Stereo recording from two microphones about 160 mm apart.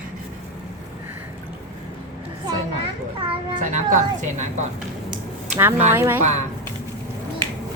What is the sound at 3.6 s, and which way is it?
A woman's voice, 50° right (ahead or behind).